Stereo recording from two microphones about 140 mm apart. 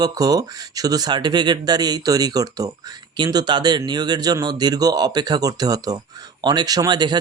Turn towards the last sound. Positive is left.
turn(degrees=-30)  # may be behind; listen again after turning